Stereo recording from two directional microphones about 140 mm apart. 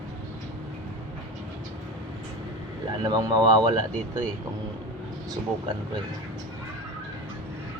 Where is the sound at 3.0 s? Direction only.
30° right (ahead or behind).